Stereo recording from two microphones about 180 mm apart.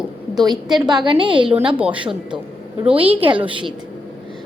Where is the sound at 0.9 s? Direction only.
25° right (ahead or behind).